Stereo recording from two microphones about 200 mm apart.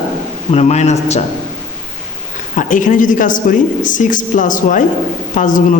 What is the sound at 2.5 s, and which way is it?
Speech, 40° left (ahead or behind).